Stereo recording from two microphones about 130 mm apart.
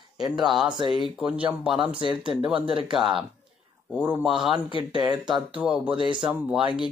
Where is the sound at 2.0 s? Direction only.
40° right (ahead or behind).